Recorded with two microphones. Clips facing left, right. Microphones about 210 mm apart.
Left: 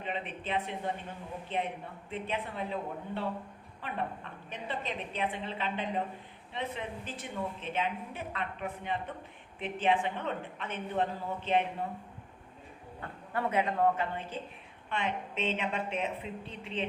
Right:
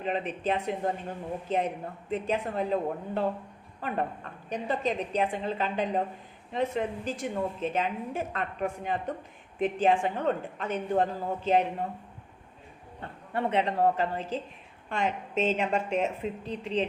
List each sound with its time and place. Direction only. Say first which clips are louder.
0.0 s a woman's voice: right 7 dB; 45° right (ahead or behind)
3.8 s a woman's voice: right 5 dB; 40° right (ahead or behind)
13.0 s a woman's voice: right 3 dB; 25° right (ahead or behind)